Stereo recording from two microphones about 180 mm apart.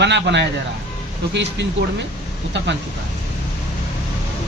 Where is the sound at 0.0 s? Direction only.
75° right (ahead or behind).